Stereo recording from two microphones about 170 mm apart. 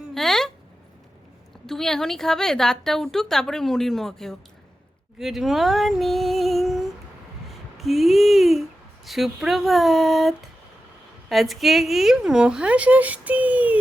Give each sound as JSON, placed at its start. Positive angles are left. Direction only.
{"t": 0.1, "sound": "a sound", "side_deg": 0}
{"t": 1.6, "sound": "a woman's voice", "side_deg": 5}
{"t": 5.2, "sound": "female singing", "side_deg": 0}
{"t": 7.8, "sound": "a woman's voice", "side_deg": 0}